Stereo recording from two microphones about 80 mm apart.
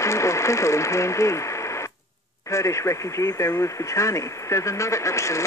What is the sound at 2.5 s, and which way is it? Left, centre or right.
Speech, left.